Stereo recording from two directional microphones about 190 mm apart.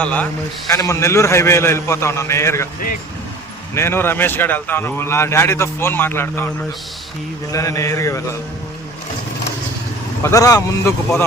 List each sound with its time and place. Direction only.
0.0 s speech: 5° left (ahead or behind)
3.8 s speech: 10° left (ahead or behind)
7.5 s speech: 15° left (ahead or behind)
10.2 s speech: 15° left (ahead or behind)